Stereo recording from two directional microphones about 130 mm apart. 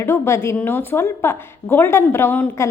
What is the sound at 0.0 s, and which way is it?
A woman's voice, 20° left (ahead or behind).